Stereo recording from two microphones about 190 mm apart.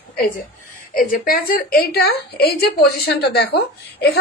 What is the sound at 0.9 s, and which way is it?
A woman's voice, 50° left (ahead or behind).